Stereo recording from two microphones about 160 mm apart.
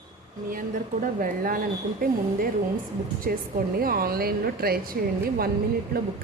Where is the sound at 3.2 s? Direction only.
65° right (ahead or behind).